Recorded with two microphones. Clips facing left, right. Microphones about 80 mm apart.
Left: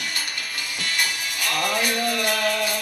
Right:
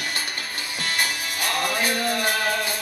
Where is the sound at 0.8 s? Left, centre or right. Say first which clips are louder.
Right 1 dB; right.